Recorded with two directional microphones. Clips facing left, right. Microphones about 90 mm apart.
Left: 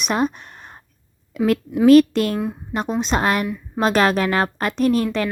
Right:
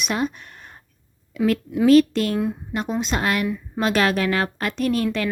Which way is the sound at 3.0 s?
35° left (ahead or behind).